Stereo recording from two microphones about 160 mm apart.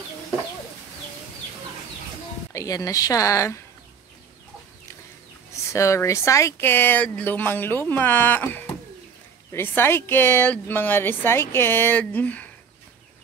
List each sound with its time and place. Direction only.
2.5 s a woman's voice: 20° left (ahead or behind)
5.7 s speech: 20° left (ahead or behind)